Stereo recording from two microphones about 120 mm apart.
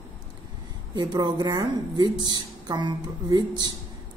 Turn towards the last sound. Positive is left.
turn(degrees=-35)  # may be behind; listen again after turning